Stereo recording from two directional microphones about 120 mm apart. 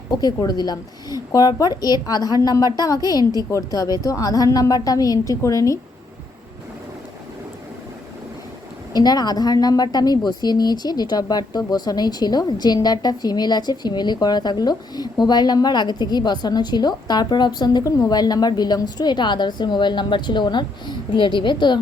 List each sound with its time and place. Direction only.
0.2 s a woman's voice: 35° left (ahead or behind)
8.9 s a woman's voice: 35° left (ahead or behind)